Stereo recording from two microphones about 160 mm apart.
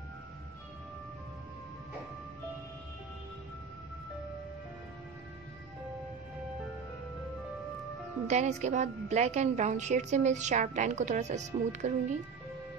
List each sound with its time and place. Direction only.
8.3 s a woman's voice: 45° right (ahead or behind)